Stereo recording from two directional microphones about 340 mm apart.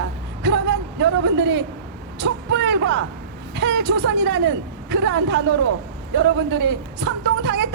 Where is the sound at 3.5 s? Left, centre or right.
Right.